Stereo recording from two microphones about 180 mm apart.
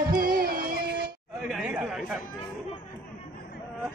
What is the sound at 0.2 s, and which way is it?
Music, 55° right (ahead or behind).